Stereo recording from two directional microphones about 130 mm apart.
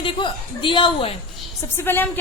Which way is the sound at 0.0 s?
40° left (ahead or behind).